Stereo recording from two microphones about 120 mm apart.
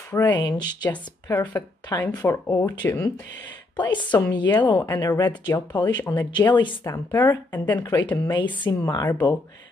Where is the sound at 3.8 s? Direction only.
40° left (ahead or behind).